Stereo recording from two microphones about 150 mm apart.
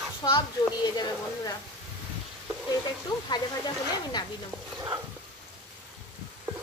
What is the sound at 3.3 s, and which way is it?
Speech, 30° left (ahead or behind).